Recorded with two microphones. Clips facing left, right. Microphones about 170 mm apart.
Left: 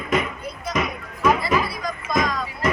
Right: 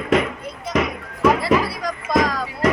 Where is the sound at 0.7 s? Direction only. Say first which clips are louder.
Right 4 dB; 90° right.